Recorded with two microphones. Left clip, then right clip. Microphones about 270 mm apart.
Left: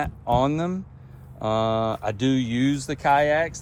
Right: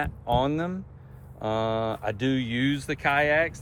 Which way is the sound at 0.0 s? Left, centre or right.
Left.